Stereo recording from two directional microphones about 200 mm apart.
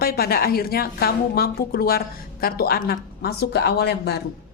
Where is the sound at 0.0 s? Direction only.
50° left (ahead or behind).